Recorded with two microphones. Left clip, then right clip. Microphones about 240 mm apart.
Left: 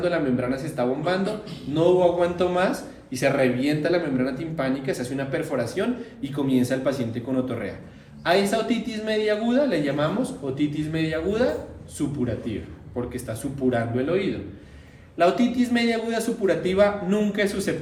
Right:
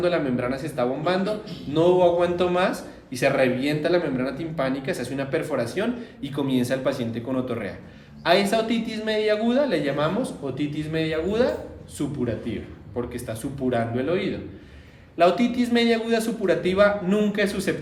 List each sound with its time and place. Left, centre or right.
0.0 s a man's voice: right